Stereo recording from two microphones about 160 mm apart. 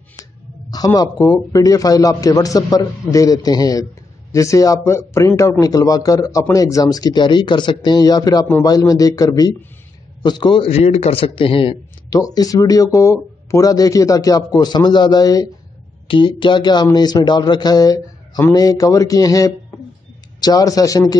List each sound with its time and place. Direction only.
0.2 s a man's voice: 25° left (ahead or behind)
12.1 s a man's voice: 20° left (ahead or behind)